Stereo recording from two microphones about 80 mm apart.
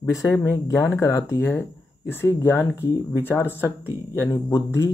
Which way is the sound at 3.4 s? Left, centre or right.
Right.